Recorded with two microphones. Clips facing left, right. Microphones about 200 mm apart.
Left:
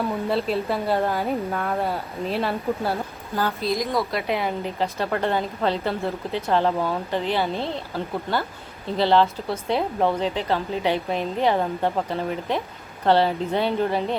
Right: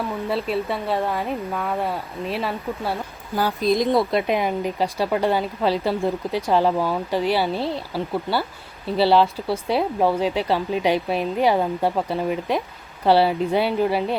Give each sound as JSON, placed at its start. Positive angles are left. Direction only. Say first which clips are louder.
{"t": 0.3, "sound": "speech", "louder": "right 1 dB", "side_deg": 0}
{"t": 3.3, "sound": "speech", "louder": "right 4 dB", "side_deg": -15}
{"t": 3.8, "sound": "speech", "louder": "right 5 dB", "side_deg": -30}
{"t": 4.3, "sound": "speech", "louder": "right 3 dB", "side_deg": -15}